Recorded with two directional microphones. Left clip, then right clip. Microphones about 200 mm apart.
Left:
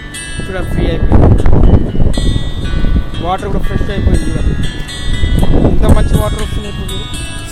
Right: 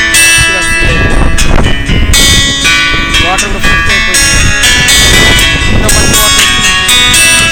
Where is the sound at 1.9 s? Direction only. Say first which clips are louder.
Right 13 dB; 45° right (ahead or behind).